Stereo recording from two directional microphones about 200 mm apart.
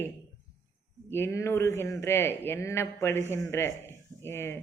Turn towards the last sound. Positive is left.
turn(degrees=10)  # may be behind; listen again after turning